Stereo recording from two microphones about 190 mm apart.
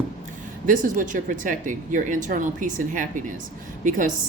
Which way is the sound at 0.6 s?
45° right (ahead or behind).